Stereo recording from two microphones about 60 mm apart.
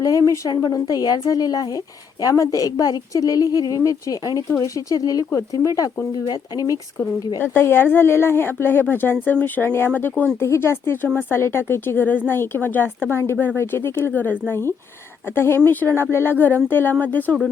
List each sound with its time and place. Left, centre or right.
0.0 s speech: left
2.2 s a woman's voice: left
5.6 s a woman's voice: left
6.3 s speech: left
7.4 s speech: left
9.9 s speech: left
10.4 s speech: left
14.1 s speech: left
15.4 s speech: left